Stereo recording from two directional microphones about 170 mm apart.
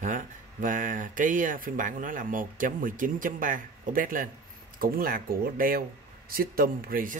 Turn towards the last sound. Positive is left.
turn(degrees=-55)  # may be behind; listen again after turning